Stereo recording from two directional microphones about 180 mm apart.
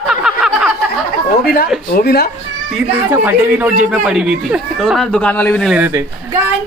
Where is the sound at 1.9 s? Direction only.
60° left (ahead or behind).